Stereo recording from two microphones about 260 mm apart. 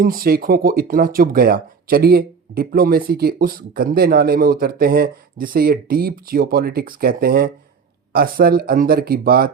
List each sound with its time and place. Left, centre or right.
0.0 s speech: right